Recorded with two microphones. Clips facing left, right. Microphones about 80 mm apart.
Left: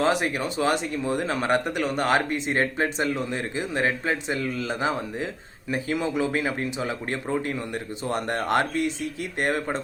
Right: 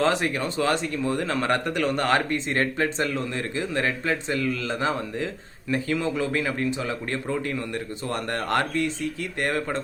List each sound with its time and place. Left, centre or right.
0.0 s speech: centre